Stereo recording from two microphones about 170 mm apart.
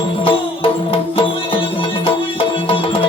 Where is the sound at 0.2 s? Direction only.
30° left (ahead or behind).